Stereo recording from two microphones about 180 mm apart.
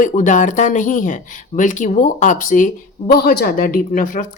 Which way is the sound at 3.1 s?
60° left (ahead or behind).